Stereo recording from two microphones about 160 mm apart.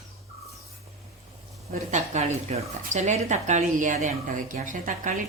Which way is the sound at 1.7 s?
50° right (ahead or behind).